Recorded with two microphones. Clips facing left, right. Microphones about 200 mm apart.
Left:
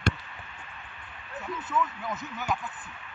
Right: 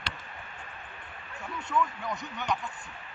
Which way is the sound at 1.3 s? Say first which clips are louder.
Even; 5° left (ahead or behind).